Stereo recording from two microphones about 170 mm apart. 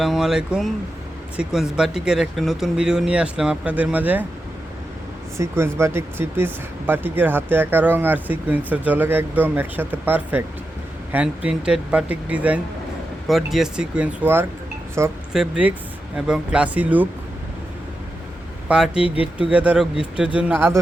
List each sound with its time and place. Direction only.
0.0 s speech: centre (ahead or behind)
5.4 s speech: 15° right (ahead or behind)
15.3 s speech: 5° right (ahead or behind)
18.7 s speech: 5° right (ahead or behind)